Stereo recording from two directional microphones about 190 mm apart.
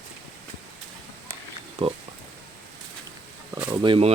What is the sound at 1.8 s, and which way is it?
Speech, 30° right (ahead or behind).